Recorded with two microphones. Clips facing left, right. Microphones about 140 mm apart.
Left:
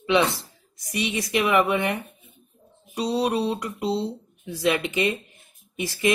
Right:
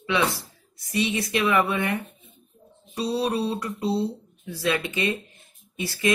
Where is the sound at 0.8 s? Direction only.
15° left (ahead or behind).